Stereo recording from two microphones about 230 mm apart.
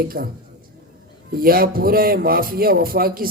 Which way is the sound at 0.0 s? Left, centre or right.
Right.